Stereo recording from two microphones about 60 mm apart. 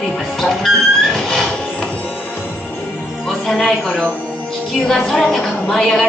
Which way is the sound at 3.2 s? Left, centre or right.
Centre.